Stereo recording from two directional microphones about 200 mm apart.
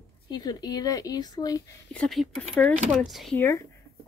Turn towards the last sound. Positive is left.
turn(degrees=0)  # may be behind; listen again after turning